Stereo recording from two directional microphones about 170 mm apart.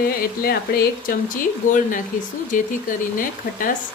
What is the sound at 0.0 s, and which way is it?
Speech, 65° left (ahead or behind).